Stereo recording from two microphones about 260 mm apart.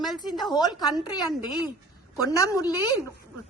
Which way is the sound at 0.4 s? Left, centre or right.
Centre.